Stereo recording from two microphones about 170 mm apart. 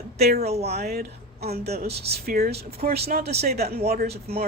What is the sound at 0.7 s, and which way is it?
Speech, 70° right (ahead or behind).